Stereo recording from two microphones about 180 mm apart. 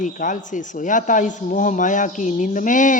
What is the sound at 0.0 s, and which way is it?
Mantra, 45° left (ahead or behind).